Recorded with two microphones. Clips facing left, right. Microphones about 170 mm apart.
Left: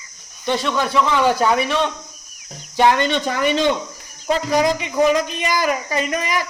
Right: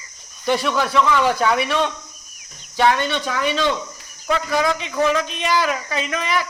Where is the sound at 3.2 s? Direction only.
45° left (ahead or behind).